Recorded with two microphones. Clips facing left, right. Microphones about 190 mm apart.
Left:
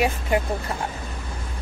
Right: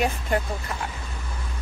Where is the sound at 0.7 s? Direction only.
30° left (ahead or behind).